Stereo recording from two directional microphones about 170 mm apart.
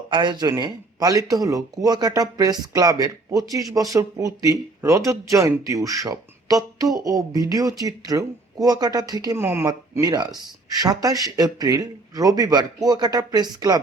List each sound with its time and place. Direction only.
0.1 s speech: 25° right (ahead or behind)